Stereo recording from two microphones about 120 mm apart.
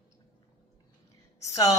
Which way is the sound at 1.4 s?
30° left (ahead or behind).